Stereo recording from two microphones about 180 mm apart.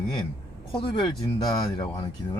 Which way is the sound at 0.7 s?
30° left (ahead or behind).